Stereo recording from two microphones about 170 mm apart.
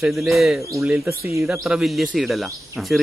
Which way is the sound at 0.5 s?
20° right (ahead or behind).